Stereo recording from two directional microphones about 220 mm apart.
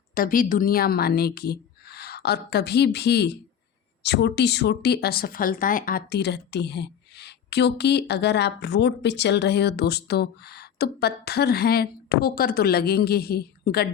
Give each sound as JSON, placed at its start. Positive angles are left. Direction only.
{"t": 0.1, "sound": "a woman's voice", "side_deg": 40}